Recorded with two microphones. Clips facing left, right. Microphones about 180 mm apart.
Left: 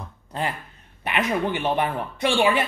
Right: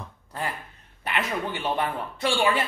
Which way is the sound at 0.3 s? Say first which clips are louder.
Left 4 dB; 20° left (ahead or behind).